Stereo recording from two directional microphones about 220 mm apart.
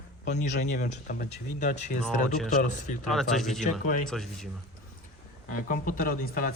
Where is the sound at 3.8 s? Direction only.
35° left (ahead or behind).